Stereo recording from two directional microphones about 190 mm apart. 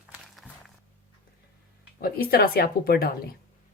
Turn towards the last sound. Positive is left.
turn(degrees=50)  # may be behind; listen again after turning